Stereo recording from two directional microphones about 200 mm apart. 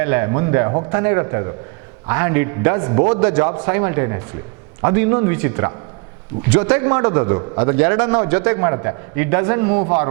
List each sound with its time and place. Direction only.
0.0 s a man's voice: 15° right (ahead or behind)